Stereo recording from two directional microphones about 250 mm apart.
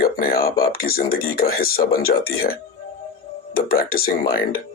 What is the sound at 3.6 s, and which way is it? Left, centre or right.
Speech, left.